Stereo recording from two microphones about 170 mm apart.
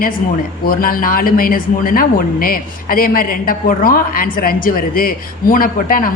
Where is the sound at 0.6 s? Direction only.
60° left (ahead or behind).